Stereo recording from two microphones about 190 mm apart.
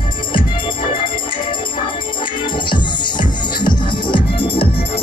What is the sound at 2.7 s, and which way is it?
Music, 25° left (ahead or behind).